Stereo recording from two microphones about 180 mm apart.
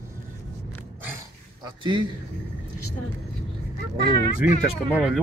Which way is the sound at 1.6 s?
25° right (ahead or behind).